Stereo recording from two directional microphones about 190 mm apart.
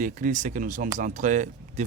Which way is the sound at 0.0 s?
45° right (ahead or behind).